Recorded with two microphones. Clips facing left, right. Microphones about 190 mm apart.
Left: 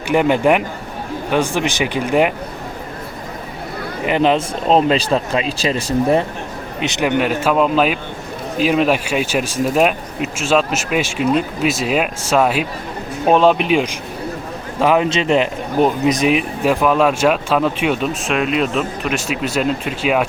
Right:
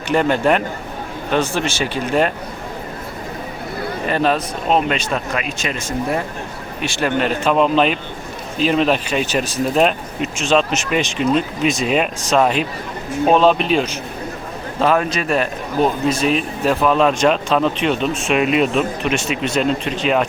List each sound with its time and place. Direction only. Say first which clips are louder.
0.1 s speech: left 2 dB; 15° left (ahead or behind)
4.0 s speech: left 3 dB; 15° left (ahead or behind)
4.7 s speech: left 4 dB; 30° left (ahead or behind); by 20.2 s 5° left (ahead or behind)